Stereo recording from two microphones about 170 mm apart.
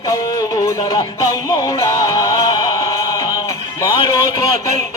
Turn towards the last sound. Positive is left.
turn(degrees=20)  # may be behind; listen again after turning